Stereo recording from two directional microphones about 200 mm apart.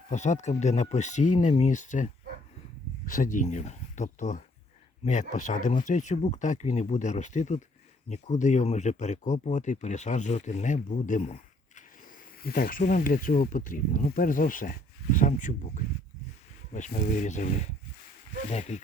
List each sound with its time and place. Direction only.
0.1 s speech: 35° left (ahead or behind)
3.1 s speech: 40° left (ahead or behind)
12.4 s speech: 45° left (ahead or behind)